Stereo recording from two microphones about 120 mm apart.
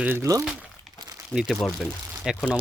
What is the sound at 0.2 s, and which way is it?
Speech, 30° right (ahead or behind).